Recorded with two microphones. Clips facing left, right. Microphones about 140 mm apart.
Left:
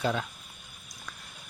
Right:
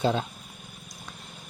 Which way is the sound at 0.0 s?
30° right (ahead or behind).